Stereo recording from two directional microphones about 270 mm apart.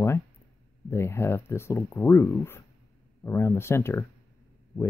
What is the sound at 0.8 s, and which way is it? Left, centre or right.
Speech, centre.